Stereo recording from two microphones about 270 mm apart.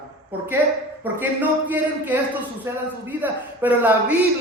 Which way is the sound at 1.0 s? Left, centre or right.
Centre.